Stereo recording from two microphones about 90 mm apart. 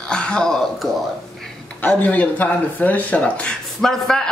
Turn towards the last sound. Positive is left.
turn(degrees=5)  # may be behind; listen again after turning